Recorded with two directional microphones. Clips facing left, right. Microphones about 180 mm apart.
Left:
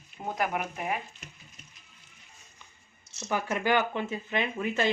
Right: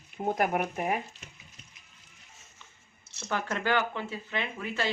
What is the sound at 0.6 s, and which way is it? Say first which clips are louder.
Speech: right 3 dB; 35° right (ahead or behind).